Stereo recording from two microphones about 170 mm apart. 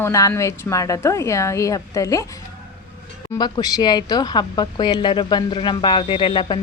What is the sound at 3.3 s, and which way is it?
Speech, 20° left (ahead or behind).